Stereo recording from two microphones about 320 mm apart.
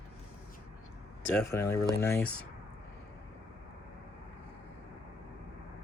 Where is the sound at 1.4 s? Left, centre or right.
Centre.